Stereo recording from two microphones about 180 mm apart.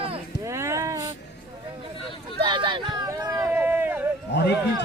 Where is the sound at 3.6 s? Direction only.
10° right (ahead or behind).